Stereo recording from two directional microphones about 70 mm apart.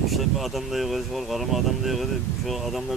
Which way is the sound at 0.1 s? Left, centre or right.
Centre.